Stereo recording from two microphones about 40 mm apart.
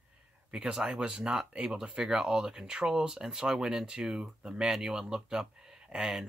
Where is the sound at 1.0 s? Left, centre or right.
Right.